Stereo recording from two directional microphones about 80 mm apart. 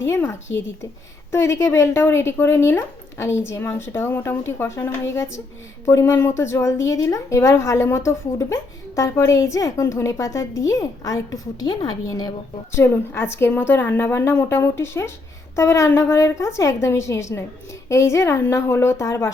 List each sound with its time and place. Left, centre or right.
0.0 s a woman's voice: left
12.7 s speech: left